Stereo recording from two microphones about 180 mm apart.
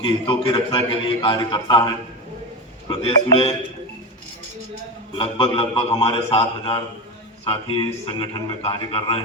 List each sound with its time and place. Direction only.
0.0 s a man's voice: 25° left (ahead or behind)
5.1 s a man's voice: 30° left (ahead or behind)